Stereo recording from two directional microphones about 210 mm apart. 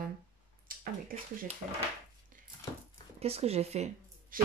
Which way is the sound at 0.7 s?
45° right (ahead or behind).